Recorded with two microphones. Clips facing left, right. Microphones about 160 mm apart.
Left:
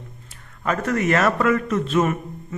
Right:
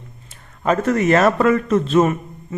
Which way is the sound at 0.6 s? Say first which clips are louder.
Right 5 dB; 25° right (ahead or behind).